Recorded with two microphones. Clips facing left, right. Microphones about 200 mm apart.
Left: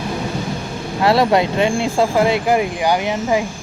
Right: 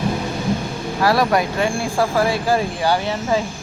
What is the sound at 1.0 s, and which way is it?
Speech, 25° left (ahead or behind).